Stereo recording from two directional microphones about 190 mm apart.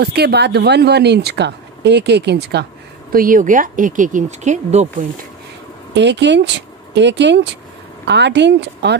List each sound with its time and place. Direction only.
0.0 s speech: 60° right (ahead or behind)
3.1 s speech: 45° right (ahead or behind)
5.9 s speech: 65° right (ahead or behind)